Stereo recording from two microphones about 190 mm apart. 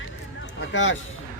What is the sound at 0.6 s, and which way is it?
Speech, 85° left.